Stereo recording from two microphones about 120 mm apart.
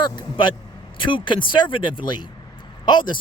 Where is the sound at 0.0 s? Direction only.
40° left (ahead or behind).